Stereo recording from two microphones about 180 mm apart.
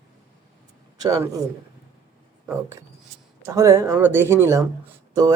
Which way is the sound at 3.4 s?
15° right (ahead or behind).